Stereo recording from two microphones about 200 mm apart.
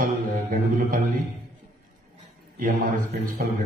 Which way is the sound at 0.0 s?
45° right (ahead or behind).